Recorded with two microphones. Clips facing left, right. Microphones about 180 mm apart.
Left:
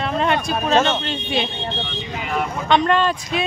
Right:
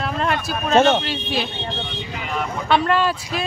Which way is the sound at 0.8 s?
60° right (ahead or behind).